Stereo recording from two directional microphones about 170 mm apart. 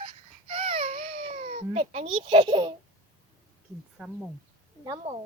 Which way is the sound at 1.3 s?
50° right (ahead or behind).